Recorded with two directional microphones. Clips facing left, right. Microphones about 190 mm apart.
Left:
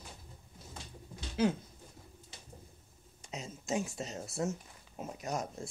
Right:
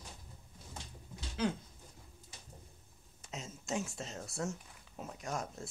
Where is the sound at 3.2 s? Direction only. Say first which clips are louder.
Left 3 dB; centre (ahead or behind).